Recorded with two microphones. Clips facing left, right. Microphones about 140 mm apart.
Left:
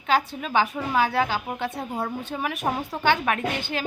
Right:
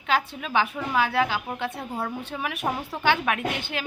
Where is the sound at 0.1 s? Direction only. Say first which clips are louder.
Left 2 dB; centre (ahead or behind).